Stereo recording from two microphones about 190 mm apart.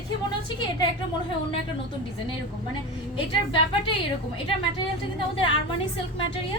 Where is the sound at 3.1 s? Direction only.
25° left (ahead or behind).